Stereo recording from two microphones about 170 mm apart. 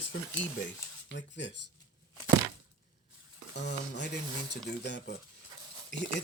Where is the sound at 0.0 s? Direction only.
90° left.